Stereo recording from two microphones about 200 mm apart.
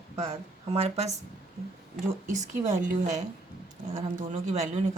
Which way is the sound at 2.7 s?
35° right (ahead or behind).